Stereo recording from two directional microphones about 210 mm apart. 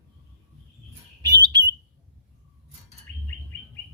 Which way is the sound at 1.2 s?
20° right (ahead or behind).